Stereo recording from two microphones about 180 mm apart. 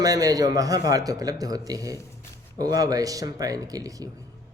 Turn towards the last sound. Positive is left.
turn(degrees=-20)  # may be behind; listen again after turning